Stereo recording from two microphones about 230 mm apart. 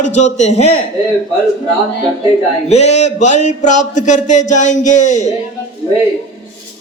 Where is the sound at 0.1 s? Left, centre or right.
Left.